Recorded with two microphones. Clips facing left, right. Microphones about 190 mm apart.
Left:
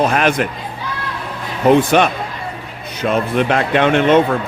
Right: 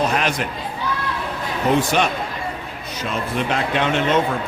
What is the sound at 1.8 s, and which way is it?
A man's voice, 60° left (ahead or behind).